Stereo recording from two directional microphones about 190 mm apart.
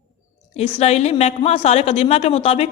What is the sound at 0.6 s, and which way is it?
A woman's voice, 35° left (ahead or behind).